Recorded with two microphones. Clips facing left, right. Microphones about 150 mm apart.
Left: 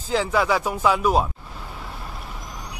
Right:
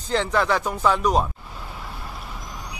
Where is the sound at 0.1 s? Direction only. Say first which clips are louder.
Left 1 dB; 5° left (ahead or behind).